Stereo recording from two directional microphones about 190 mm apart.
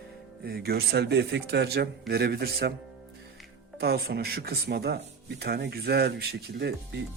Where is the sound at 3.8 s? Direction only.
55° right (ahead or behind).